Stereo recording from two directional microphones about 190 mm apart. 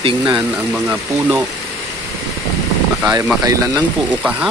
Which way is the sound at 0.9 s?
10° right (ahead or behind).